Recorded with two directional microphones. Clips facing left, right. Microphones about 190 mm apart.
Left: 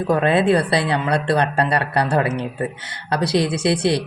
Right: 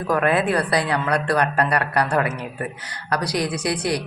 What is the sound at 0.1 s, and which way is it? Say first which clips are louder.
A man's voice: left 3 dB; 25° left (ahead or behind).